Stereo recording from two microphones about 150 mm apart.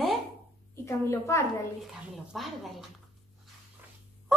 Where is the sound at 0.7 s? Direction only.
20° left (ahead or behind).